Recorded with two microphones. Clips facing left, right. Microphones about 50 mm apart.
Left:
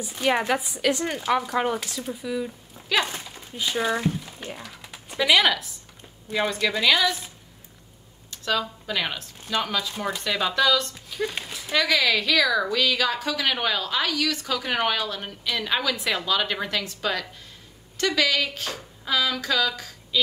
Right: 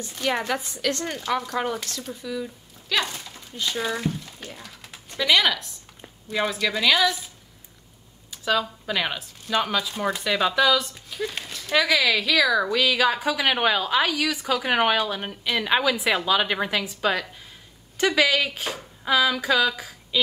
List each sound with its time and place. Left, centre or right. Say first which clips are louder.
0.0 s speech: left 3 dB; centre
4.4 s typing: left 3 dB; left
4.6 s a woman's voice: left 2 dB; centre
8.3 s a woman's voice: right 2 dB; centre
11.1 s a sound: left 1 dB; centre
11.7 s a woman's voice: right 1 dB; centre